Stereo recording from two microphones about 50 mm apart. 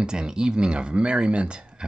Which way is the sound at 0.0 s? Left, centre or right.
Centre.